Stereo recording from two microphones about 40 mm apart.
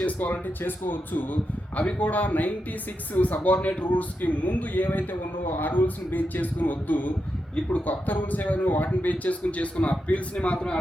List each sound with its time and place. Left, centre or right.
0.0 s speech: left
1.8 s a man's voice: left
2.0 s a man's voice: left